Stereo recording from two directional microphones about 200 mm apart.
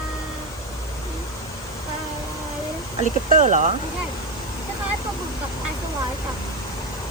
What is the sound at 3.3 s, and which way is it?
Speech, 40° right (ahead or behind).